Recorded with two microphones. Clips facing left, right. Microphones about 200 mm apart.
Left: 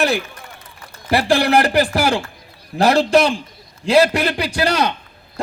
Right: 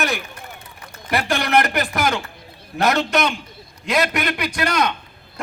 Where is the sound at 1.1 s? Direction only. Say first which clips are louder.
Left 4 dB; 30° left (ahead or behind).